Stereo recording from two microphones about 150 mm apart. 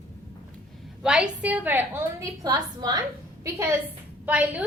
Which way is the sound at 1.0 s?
5° right (ahead or behind).